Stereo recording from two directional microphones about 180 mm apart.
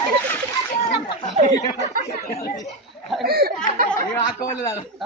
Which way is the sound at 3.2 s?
60° right (ahead or behind).